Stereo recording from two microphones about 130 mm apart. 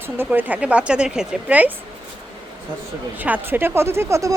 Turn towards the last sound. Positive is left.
turn(degrees=-25)  # may be behind; listen again after turning